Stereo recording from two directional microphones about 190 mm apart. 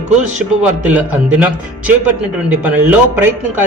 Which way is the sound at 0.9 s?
5° right (ahead or behind).